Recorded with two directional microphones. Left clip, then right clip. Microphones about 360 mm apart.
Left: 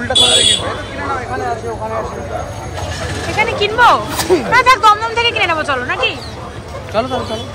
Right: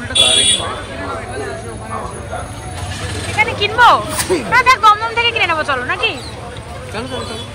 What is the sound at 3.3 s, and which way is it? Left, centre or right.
Speech, centre.